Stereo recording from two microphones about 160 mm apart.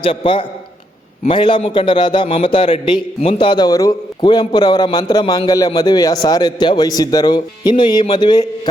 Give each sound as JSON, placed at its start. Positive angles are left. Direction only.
{"t": 0.0, "sound": "a man's voice", "side_deg": 35}